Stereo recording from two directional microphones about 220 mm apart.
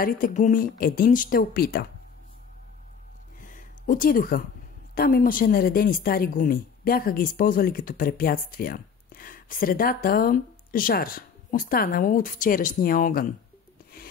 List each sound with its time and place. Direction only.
0.0 s speech: 40° left (ahead or behind)
3.3 s a sound: 35° left (ahead or behind)
4.9 s speech: 40° left (ahead or behind)